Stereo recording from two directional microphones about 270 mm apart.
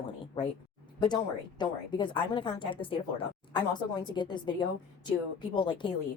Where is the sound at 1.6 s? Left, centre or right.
Centre.